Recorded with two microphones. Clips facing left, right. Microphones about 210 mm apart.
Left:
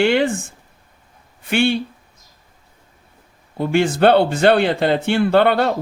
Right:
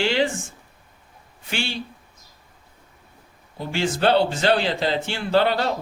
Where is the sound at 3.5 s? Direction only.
55° left (ahead or behind).